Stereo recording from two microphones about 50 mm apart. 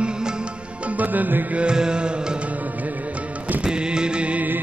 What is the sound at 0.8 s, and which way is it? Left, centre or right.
Music, right.